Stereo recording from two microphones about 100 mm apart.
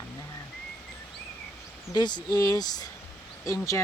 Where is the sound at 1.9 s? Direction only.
45° left (ahead or behind).